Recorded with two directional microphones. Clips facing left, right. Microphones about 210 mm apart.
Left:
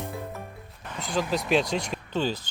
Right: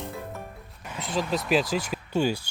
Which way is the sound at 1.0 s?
Centre (ahead or behind).